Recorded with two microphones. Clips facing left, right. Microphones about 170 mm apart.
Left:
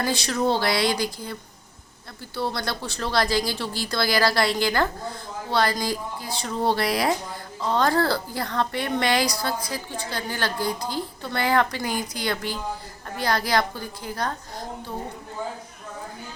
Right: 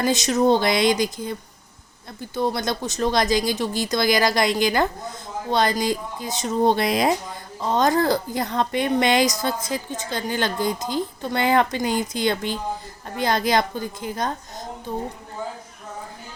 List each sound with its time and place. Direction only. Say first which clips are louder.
0.0 s a woman's voice: right 5 dB; 20° right (ahead or behind)